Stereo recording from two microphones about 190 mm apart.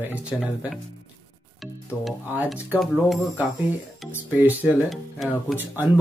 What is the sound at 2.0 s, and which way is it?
Speech, 5° right (ahead or behind).